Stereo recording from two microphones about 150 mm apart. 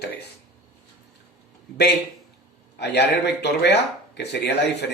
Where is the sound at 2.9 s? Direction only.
90° left.